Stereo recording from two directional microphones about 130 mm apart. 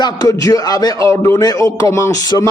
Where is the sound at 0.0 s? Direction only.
30° left (ahead or behind).